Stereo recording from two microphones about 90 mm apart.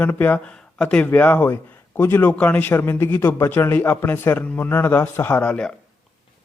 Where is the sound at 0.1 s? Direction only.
20° left (ahead or behind).